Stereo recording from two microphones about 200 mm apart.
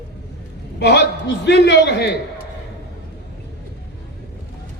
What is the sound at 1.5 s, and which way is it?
Speech, 60° left (ahead or behind).